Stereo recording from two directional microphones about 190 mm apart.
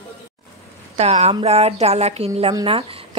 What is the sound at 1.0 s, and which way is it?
Speech, 35° right (ahead or behind).